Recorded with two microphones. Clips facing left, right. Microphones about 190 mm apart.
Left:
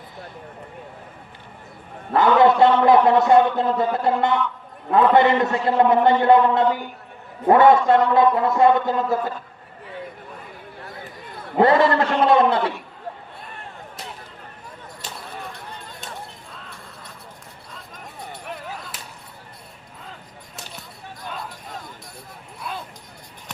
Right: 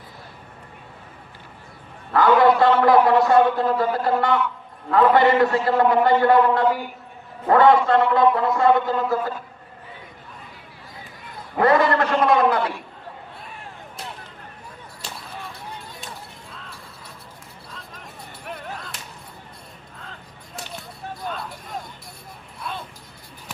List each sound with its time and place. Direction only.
2.1 s a man's voice: 20° left (ahead or behind)
11.5 s a man's voice: 25° left (ahead or behind)
13.4 s a sound: centre (ahead or behind)
18.4 s whip: centre (ahead or behind)